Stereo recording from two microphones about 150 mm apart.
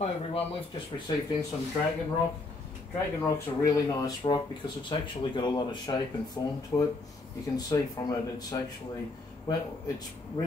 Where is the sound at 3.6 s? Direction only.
25° left (ahead or behind).